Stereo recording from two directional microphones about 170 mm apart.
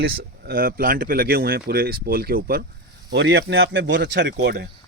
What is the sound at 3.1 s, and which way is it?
Speech, 80° right.